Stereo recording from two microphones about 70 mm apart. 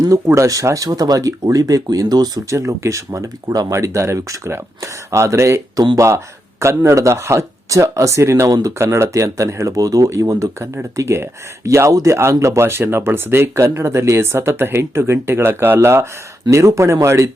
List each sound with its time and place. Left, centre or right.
0.3 s speech: right
0.9 s speech: right
2.5 s speech: right
5.7 s speech: right
6.0 s speech: right
9.7 s speech: right
10.9 s speech: right